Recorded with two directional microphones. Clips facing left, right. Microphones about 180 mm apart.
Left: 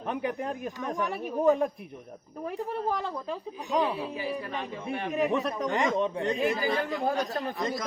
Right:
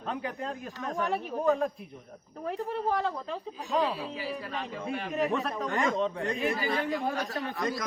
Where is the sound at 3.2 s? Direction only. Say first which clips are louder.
Left 2 dB; 15° left (ahead or behind).